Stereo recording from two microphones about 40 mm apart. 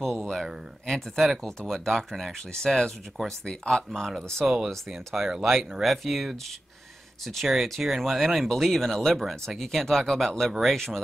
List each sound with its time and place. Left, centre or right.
0.0 s a sound: centre
0.8 s speech: centre
3.9 s speech: centre
4.4 s speech: centre